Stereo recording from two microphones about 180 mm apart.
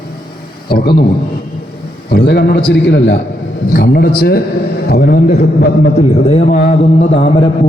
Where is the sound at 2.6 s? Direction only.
75° left (ahead or behind).